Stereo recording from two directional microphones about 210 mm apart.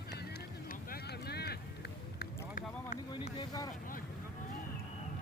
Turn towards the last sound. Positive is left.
turn(degrees=20)  # may be behind; listen again after turning